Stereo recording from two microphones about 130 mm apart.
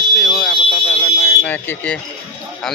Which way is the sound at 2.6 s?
5° left (ahead or behind).